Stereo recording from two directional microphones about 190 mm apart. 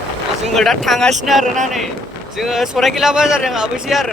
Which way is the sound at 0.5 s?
Centre (ahead or behind).